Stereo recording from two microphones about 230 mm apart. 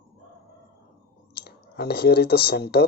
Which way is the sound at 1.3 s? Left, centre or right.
Left.